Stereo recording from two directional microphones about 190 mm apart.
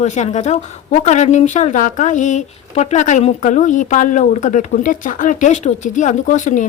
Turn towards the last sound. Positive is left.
turn(degrees=40)  # may be behind; listen again after turning